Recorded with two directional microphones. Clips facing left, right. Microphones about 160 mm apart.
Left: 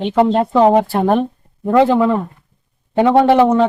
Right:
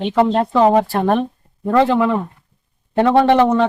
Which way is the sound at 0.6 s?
15° left (ahead or behind).